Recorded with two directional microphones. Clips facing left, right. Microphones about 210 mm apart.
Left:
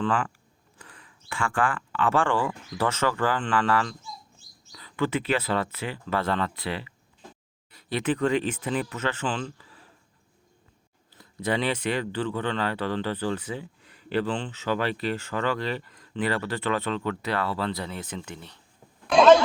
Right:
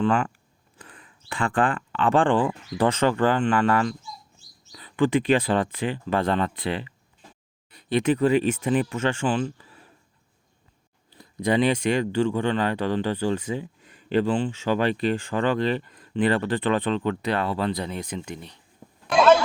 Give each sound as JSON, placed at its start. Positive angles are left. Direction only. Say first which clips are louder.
{"t": 1.3, "sound": "speech", "louder": "right 3 dB", "side_deg": -35}
{"t": 1.5, "sound": "speech", "louder": "right 3 dB", "side_deg": -20}
{"t": 4.7, "sound": "a sound", "louder": "right 6 dB", "side_deg": -15}
{"t": 5.5, "sound": "speech", "louder": "right 5 dB", "side_deg": -15}
{"t": 8.5, "sound": "speech", "louder": "right 6 dB", "side_deg": -20}
{"t": 11.1, "sound": "speech", "louder": "right 5 dB", "side_deg": -15}
{"t": 19.1, "sound": "a sound", "louder": "left 2 dB", "side_deg": -5}